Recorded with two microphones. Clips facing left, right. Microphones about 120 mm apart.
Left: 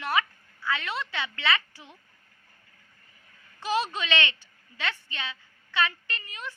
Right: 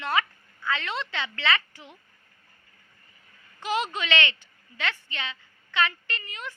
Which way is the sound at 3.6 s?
20° right (ahead or behind).